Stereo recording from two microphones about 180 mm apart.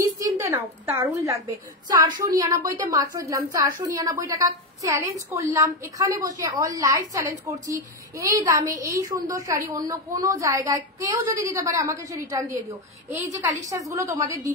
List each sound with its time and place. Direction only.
0.0 s a woman's voice: 15° right (ahead or behind)